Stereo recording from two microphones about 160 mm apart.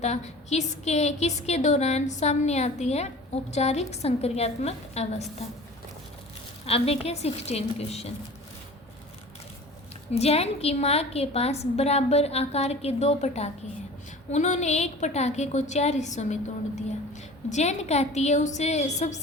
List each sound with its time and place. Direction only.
0.0 s a woman's voice: 45° left (ahead or behind)
6.7 s a woman's voice: 40° left (ahead or behind)
10.1 s a woman's voice: 40° left (ahead or behind)